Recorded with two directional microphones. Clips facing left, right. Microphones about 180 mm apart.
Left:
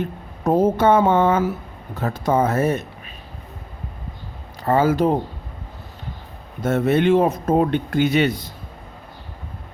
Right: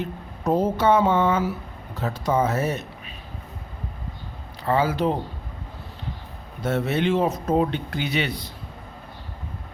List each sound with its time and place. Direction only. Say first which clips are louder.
0.0 s speech: left 4 dB; 50° left (ahead or behind)
4.6 s speech: left 4 dB; 45° left (ahead or behind)
6.6 s speech: left 5 dB; 50° left (ahead or behind)